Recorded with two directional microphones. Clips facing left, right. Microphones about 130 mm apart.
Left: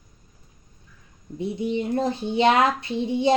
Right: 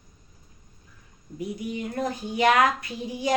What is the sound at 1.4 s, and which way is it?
Speech, 25° left (ahead or behind).